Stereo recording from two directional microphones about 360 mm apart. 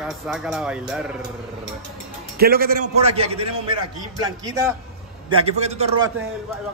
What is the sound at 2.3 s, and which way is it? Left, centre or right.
A man's voice, right.